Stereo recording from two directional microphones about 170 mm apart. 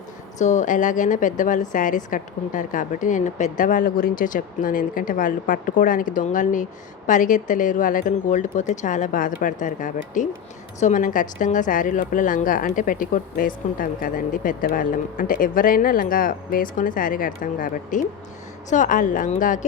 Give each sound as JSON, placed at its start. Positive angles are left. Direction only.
{"t": 0.3, "sound": "a woman's voice", "side_deg": 45}